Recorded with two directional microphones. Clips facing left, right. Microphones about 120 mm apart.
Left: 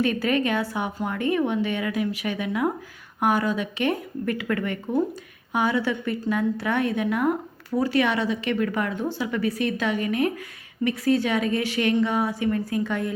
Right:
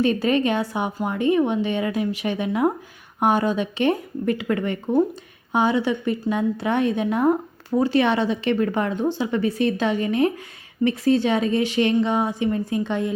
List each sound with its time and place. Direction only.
0.0 s a woman's voice: 25° right (ahead or behind)